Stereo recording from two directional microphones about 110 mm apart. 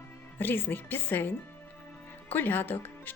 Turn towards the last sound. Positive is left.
turn(degrees=15)  # may be behind; listen again after turning